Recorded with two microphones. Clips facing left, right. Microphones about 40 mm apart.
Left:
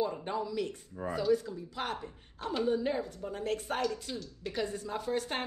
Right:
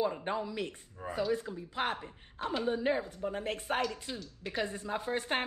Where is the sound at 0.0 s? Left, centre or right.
Right.